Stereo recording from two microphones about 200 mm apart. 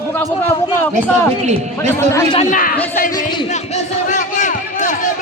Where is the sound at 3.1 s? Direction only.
25° left (ahead or behind).